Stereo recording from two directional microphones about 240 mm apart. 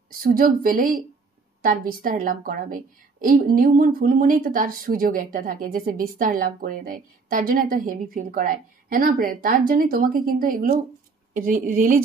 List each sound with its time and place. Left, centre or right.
0.2 s a woman's voice: right